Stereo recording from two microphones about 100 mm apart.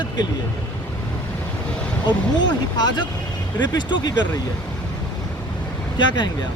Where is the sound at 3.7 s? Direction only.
45° left (ahead or behind).